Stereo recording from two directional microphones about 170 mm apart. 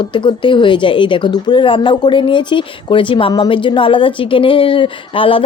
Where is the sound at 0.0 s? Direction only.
25° left (ahead or behind).